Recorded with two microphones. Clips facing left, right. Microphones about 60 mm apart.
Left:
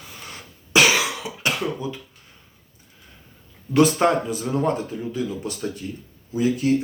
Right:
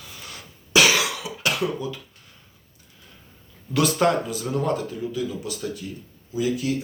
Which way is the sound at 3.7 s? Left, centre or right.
Left.